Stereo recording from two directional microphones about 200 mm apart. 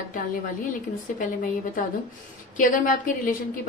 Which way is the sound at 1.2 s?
40° left (ahead or behind).